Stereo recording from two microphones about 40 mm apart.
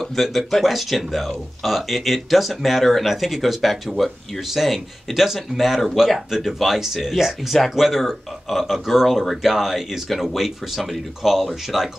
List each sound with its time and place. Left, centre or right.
0.0 s speech: centre